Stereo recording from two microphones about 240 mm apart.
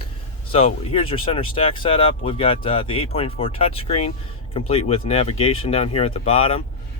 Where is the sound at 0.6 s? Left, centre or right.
Left.